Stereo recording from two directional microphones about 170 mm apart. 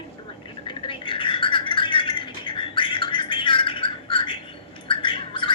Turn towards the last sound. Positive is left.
turn(degrees=30)  # may be behind; listen again after turning